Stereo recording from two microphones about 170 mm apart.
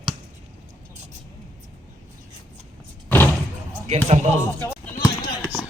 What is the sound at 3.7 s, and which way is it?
Basketball bounce, 40° right (ahead or behind).